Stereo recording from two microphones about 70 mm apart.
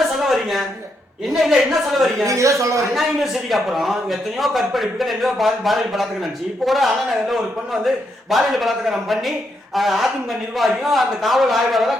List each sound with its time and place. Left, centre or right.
0.0 s a sound: centre
1.3 s a man's voice: centre
2.2 s a man's voice: right
2.9 s a man's voice: centre